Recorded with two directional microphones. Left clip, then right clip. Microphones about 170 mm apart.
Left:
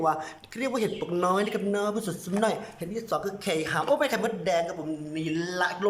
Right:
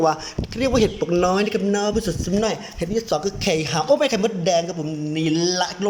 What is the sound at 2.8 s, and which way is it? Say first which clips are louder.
Speech: right 11 dB; 15° right (ahead or behind).